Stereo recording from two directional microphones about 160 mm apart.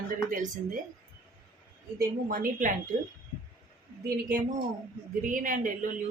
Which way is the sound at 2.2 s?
55° right (ahead or behind).